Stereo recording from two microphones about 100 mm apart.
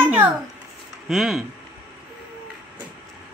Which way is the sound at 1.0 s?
Centre (ahead or behind).